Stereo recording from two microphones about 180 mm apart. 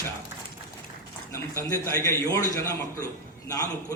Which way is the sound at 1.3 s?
15° left (ahead or behind).